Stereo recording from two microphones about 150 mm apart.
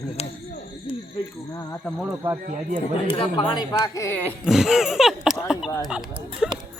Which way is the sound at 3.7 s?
20° left (ahead or behind).